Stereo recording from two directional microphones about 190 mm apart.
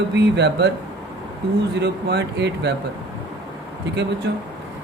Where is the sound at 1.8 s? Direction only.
60° right (ahead or behind).